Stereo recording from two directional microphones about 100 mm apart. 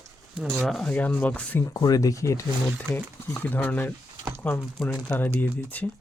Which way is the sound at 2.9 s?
20° left (ahead or behind).